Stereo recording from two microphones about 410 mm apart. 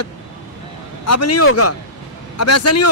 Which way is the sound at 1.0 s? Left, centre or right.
Left.